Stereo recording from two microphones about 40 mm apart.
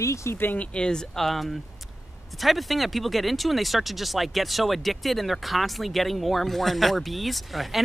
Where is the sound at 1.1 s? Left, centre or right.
Centre.